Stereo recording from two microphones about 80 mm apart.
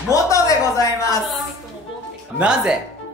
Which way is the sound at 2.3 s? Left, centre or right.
Centre.